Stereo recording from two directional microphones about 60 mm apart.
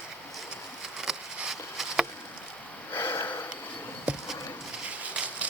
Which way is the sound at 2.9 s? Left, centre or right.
Left.